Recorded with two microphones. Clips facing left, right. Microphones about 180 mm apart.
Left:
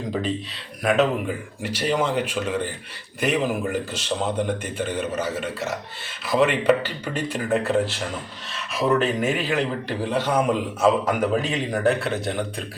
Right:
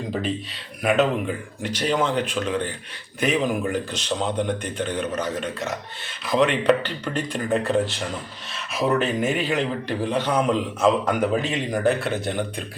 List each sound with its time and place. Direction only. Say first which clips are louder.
0.8 s a man's voice: even; centre (ahead or behind)